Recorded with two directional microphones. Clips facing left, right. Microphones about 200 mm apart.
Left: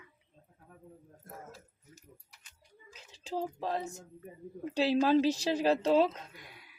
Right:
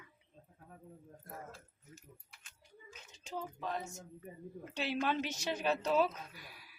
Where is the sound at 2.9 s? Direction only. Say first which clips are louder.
Left 7 dB; 35° left (ahead or behind).